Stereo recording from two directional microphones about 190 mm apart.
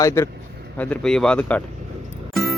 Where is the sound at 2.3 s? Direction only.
Centre (ahead or behind).